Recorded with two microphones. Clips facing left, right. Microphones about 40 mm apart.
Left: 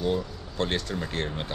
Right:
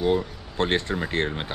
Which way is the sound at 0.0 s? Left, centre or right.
Right.